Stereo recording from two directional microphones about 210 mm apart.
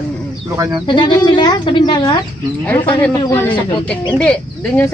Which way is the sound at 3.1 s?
20° left (ahead or behind).